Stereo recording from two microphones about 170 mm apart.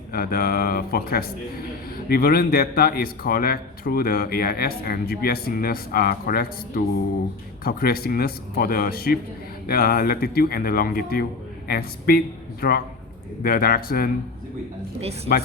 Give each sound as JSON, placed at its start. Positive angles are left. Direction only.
{"t": 0.1, "sound": "a man's voice", "side_deg": 60}